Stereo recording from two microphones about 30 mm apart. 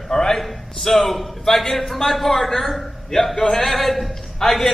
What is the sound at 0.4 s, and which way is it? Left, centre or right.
A man's voice, centre.